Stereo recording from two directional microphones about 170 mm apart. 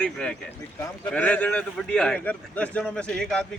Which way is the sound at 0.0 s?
5° left (ahead or behind).